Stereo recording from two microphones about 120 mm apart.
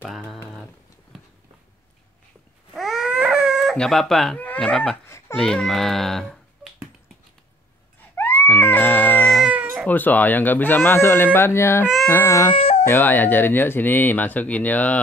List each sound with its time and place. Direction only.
2.7 s baby cry: centre (ahead or behind)
4.4 s speech: 10° left (ahead or behind)
8.2 s music: 15° left (ahead or behind)
9.5 s cat: 15° right (ahead or behind)
9.8 s speech: 15° left (ahead or behind)
12.5 s baby cry: 55° left (ahead or behind)
12.8 s speech: 15° left (ahead or behind)